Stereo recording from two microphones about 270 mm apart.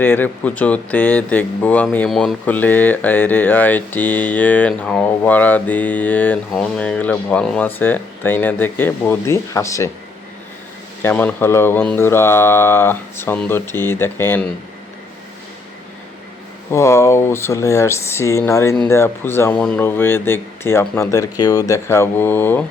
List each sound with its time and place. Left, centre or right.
0.0 s speech: centre
11.0 s speech: centre
16.7 s speech: centre